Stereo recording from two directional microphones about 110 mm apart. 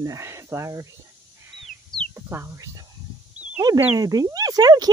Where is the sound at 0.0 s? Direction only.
30° right (ahead or behind).